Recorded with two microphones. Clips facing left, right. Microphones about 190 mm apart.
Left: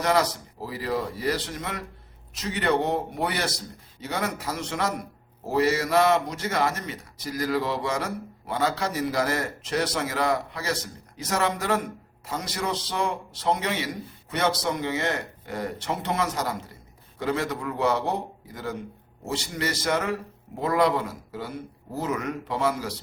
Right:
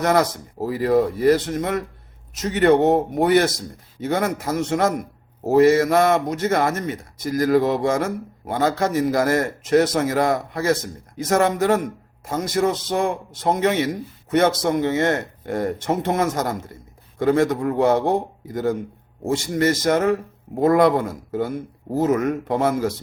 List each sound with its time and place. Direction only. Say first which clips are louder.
0.0 s a man's voice: right 5 dB; 50° right (ahead or behind)